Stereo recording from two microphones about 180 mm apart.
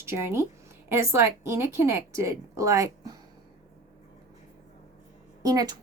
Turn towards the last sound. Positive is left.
turn(degrees=-20)  # may be behind; listen again after turning